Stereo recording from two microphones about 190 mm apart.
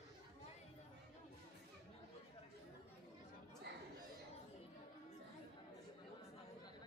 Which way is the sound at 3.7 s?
60° right (ahead or behind).